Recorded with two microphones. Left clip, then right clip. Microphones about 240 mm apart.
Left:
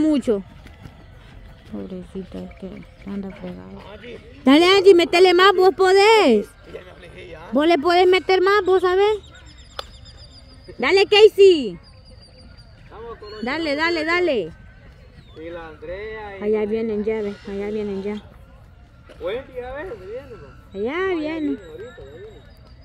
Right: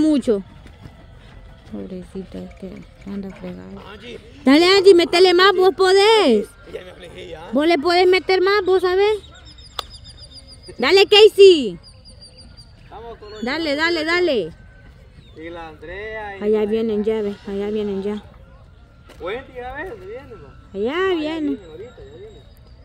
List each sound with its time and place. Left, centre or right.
0.0 s speech: centre
1.7 s speech: centre
3.3 s speech: centre
3.8 s a man's voice: right
4.5 s speech: centre
6.7 s a man's voice: right
7.5 s speech: centre
10.8 s speech: centre
13.4 s speech: centre
15.3 s speech: right
16.3 s speech: centre
19.0 s speech: right
20.7 s speech: centre